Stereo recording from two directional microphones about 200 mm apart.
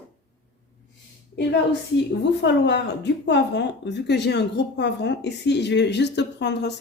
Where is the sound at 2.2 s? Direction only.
60° left (ahead or behind).